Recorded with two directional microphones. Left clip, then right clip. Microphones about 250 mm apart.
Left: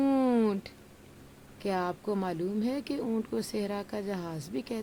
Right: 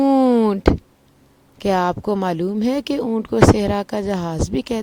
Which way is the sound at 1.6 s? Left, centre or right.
Right.